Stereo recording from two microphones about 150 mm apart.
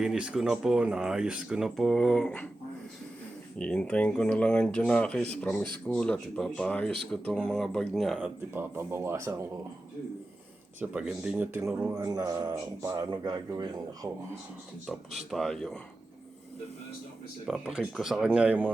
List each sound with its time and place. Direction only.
0.0 s speech: 5° right (ahead or behind)
3.6 s speech: 5° left (ahead or behind)
8.5 s speech: 15° right (ahead or behind)
10.8 s speech: 5° right (ahead or behind)
12.0 s speech: 25° right (ahead or behind)
15.3 s speech: centre (ahead or behind)
17.4 s speech: centre (ahead or behind)